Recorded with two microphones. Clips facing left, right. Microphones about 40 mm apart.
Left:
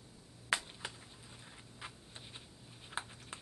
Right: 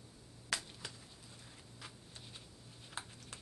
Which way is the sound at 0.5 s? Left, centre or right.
Left.